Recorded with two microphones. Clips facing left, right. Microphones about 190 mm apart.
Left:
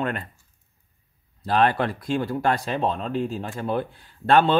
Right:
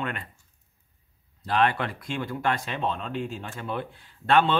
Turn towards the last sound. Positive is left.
turn(degrees=40)  # may be behind; listen again after turning